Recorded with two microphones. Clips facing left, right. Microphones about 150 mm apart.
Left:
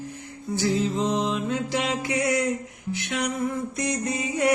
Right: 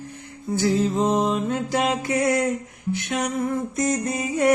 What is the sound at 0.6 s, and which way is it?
Mantra, 50° right (ahead or behind).